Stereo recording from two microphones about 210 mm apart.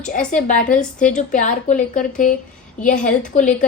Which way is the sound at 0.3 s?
35° left (ahead or behind).